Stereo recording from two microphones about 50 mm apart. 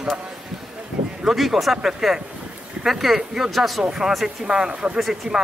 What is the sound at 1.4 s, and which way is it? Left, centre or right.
Speech, centre.